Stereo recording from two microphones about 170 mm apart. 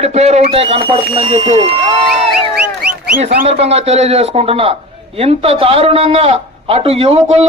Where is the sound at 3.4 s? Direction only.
40° right (ahead or behind).